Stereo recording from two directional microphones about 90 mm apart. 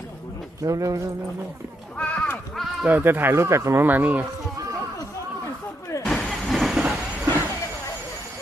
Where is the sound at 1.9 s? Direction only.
15° left (ahead or behind).